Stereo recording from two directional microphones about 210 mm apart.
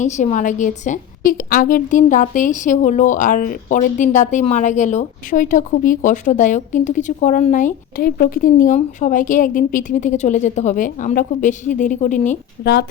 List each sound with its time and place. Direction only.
0.0 s a woman's voice: 35° left (ahead or behind)